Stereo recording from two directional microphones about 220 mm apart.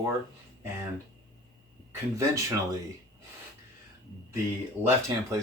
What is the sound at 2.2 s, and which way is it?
Speech, 15° right (ahead or behind).